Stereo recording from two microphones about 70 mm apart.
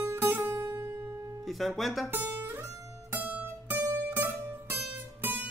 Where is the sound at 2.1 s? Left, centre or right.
Right.